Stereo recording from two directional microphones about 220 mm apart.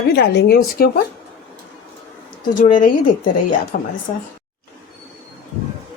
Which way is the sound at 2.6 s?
40° left (ahead or behind).